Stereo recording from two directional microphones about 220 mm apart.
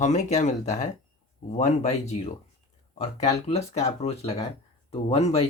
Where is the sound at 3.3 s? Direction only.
30° left (ahead or behind).